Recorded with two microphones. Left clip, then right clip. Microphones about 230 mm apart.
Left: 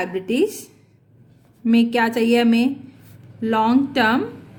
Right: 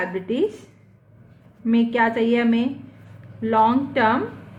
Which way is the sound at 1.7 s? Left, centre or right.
Left.